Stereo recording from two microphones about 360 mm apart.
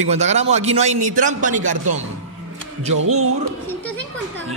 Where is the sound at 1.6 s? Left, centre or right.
Right.